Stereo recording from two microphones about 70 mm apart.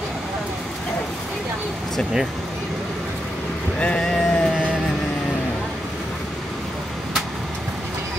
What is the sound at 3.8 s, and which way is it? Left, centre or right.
Speech, centre.